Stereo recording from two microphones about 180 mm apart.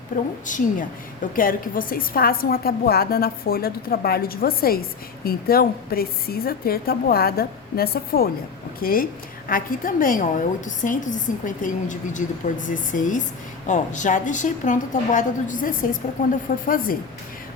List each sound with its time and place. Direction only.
0.1 s a woman's voice: 50° left (ahead or behind)